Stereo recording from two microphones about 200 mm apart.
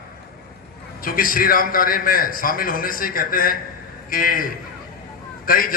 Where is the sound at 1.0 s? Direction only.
45° left (ahead or behind).